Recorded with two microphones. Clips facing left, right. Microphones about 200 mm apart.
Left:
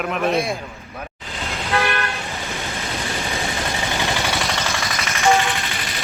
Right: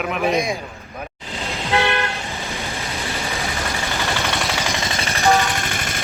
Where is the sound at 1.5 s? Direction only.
15° right (ahead or behind).